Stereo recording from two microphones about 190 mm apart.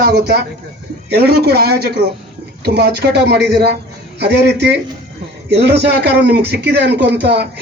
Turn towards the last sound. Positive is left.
turn(degrees=-60)  # may be behind; listen again after turning